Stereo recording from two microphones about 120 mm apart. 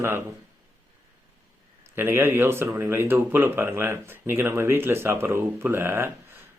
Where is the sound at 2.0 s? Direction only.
20° right (ahead or behind).